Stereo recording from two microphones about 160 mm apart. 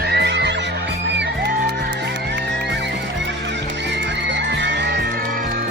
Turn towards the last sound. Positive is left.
turn(degrees=-90)